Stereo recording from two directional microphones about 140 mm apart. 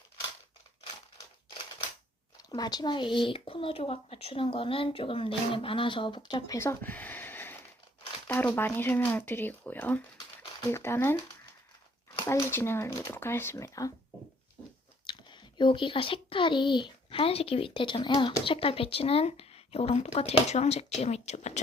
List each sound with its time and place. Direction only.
1.5 s a sound: 40° left (ahead or behind)
2.4 s speech: 30° left (ahead or behind)
6.6 s a sound: 15° left (ahead or behind)
8.3 s speech: 15° left (ahead or behind)
12.2 s speech: 20° left (ahead or behind)
15.0 s a child's voice: 35° left (ahead or behind); by 21.6 s 55° left (ahead or behind)